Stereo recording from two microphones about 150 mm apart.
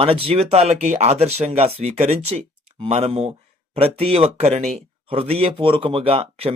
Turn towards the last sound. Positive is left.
turn(degrees=-40)  # may be behind; listen again after turning